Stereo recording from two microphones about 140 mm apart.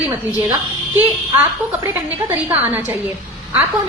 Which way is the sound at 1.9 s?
15° right (ahead or behind).